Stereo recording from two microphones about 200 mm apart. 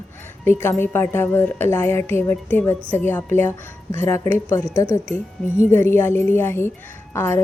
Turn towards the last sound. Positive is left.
turn(degrees=10)  # may be behind; listen again after turning